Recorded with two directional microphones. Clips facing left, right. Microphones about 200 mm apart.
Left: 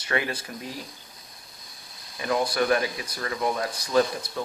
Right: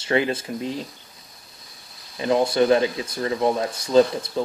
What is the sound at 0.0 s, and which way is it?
Speech, 25° right (ahead or behind).